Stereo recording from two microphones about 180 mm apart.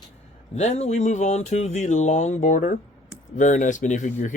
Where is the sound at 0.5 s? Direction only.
40° left (ahead or behind).